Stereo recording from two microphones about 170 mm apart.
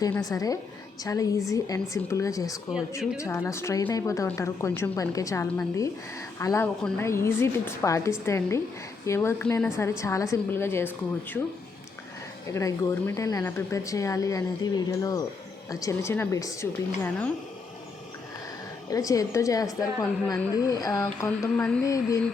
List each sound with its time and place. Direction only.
0.0 s a woman's voice: 20° left (ahead or behind)
12.5 s a woman's voice: 20° left (ahead or behind)
18.9 s a woman's voice: 20° left (ahead or behind)